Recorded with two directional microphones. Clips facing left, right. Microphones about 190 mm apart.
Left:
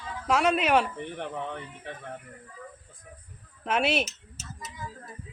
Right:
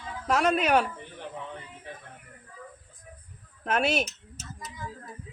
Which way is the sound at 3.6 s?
5° left (ahead or behind).